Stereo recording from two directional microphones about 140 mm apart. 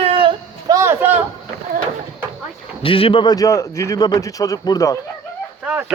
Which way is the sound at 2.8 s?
40° left (ahead or behind).